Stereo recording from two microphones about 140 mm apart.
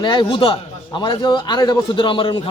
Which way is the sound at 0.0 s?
35° left (ahead or behind).